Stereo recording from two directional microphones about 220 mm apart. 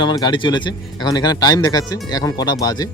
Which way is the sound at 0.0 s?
20° left (ahead or behind).